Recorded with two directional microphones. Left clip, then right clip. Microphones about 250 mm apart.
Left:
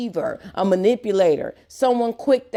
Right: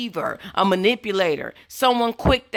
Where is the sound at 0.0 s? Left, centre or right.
Centre.